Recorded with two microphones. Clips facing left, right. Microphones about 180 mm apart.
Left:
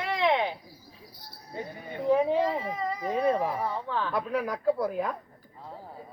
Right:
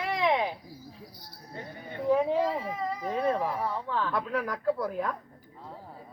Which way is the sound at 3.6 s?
Centre (ahead or behind).